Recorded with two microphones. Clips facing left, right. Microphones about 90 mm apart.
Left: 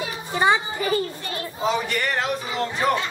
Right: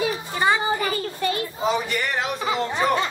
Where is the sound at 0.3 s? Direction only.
15° left (ahead or behind).